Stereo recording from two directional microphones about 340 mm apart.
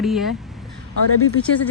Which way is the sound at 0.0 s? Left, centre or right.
Centre.